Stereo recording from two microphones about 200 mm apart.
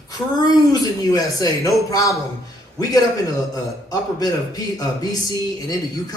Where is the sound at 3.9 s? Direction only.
20° left (ahead or behind).